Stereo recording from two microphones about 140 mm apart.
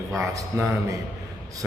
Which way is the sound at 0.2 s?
20° right (ahead or behind).